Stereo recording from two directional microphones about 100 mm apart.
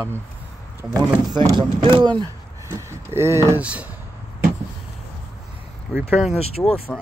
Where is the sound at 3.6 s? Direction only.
15° right (ahead or behind).